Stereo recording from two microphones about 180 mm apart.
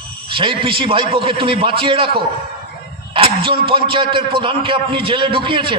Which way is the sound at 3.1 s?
30° right (ahead or behind).